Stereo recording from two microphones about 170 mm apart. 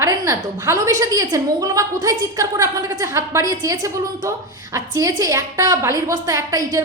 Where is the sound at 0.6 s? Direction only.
20° right (ahead or behind).